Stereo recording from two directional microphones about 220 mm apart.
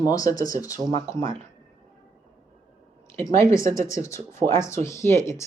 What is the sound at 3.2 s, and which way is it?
Speech, 15° left (ahead or behind).